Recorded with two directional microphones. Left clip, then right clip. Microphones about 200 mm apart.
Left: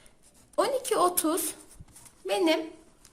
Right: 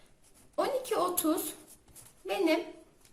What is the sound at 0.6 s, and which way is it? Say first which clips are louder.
A woman's voice: left 5 dB; 50° left (ahead or behind).